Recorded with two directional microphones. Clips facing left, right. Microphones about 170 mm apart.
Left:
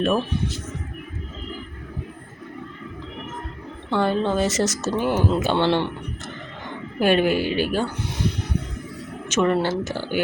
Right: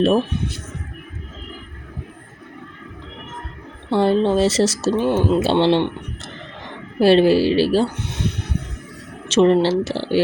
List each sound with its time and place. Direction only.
3.8 s speech: 30° right (ahead or behind)
7.0 s a woman's voice: 30° right (ahead or behind)
9.3 s speech: 25° right (ahead or behind)